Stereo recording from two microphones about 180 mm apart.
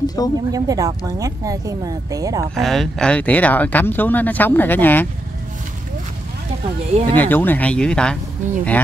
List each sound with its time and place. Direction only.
0.0 s a sound: 20° left (ahead or behind)
0.5 s speech: 20° right (ahead or behind)
2.5 s speech: centre (ahead or behind)
6.9 s speech: 35° right (ahead or behind)
7.2 s speech: 10° left (ahead or behind)